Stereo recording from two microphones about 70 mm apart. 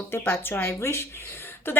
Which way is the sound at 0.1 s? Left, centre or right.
Left.